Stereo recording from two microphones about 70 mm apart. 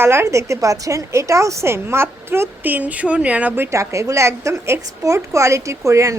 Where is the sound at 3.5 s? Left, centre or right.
Right.